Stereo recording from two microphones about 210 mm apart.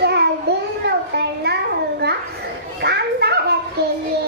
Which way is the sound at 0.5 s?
50° right (ahead or behind).